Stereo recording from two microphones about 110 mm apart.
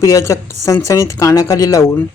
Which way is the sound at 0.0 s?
30° left (ahead or behind).